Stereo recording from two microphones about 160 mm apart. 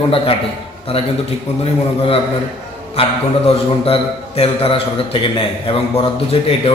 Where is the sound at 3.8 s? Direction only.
35° left (ahead or behind).